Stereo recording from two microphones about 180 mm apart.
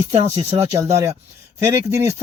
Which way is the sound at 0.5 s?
15° right (ahead or behind).